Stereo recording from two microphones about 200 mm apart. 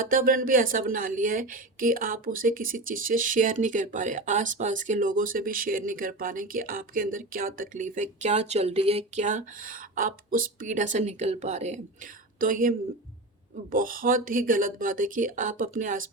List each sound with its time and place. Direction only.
0.0 s a woman's voice: 45° right (ahead or behind)